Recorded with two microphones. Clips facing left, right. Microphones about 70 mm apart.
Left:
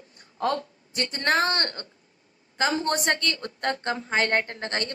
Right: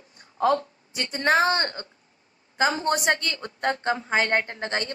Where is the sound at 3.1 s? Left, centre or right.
Centre.